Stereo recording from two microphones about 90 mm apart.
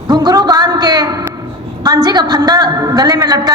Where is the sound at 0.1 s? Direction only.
50° right (ahead or behind).